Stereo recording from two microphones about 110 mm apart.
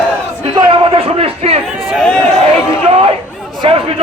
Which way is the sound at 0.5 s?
50° right (ahead or behind).